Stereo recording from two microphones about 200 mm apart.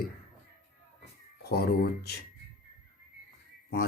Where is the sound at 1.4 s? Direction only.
50° left (ahead or behind).